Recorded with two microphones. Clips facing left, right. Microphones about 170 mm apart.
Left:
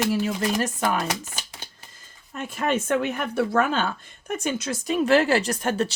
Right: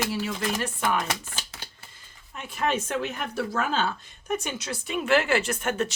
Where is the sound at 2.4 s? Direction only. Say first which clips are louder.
Left 2 dB; 50° left (ahead or behind).